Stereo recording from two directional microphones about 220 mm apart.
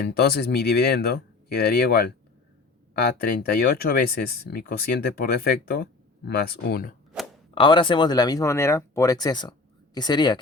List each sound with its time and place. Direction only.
0.0 s speech: 45° left (ahead or behind)
3.2 s speech: 45° left (ahead or behind)
7.5 s speech: 20° left (ahead or behind)